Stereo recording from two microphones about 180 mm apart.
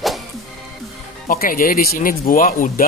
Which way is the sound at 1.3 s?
50° left (ahead or behind).